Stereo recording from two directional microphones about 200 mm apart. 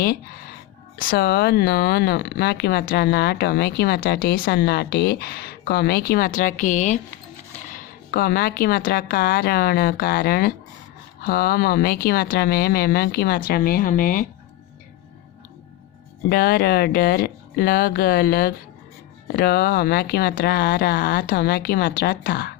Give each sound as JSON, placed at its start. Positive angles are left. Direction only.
{"t": 1.0, "sound": "speech", "side_deg": 50}
{"t": 16.3, "sound": "speech", "side_deg": 50}